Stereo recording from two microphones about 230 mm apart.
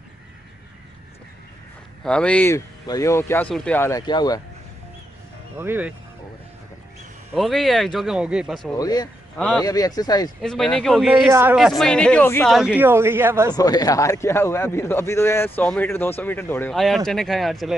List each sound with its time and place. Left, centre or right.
2.0 s a man's voice: centre
5.6 s speech: centre
7.3 s speech: centre
8.7 s a man's voice: centre
10.4 s speech: centre
13.5 s a man's voice: centre